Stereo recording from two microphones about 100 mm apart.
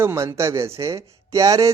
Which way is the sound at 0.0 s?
25° right (ahead or behind).